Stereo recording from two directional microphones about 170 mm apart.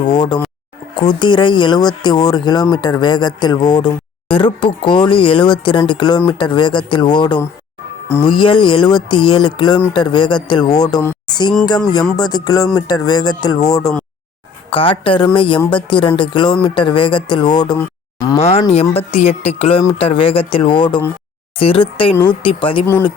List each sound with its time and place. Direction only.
0.0 s speech: 25° left (ahead or behind)
14.7 s speech: 30° left (ahead or behind)
17.7 s a sound: 20° left (ahead or behind)
18.3 s speech: 40° left (ahead or behind)